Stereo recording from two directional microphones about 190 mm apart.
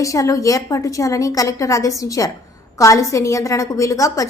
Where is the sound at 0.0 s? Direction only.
15° left (ahead or behind).